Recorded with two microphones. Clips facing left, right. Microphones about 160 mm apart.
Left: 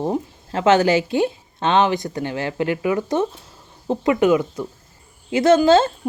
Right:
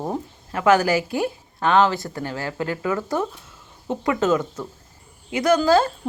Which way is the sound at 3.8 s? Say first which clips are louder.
Left 4 dB; 30° left (ahead or behind).